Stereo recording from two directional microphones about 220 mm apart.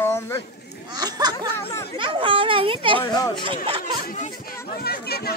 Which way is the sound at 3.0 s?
15° left (ahead or behind).